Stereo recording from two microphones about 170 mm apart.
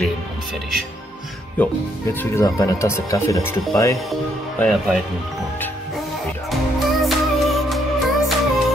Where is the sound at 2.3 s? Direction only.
20° left (ahead or behind).